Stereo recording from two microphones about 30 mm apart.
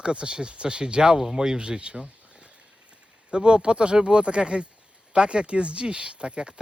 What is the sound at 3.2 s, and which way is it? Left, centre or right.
Speech, right.